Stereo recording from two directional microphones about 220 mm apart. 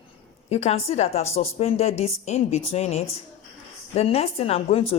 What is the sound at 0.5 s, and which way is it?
Speech, 30° left (ahead or behind).